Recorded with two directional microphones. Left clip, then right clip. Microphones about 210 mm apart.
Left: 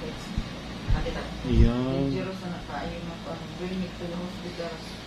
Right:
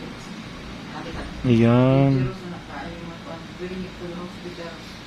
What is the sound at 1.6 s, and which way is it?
Speech, 45° right (ahead or behind).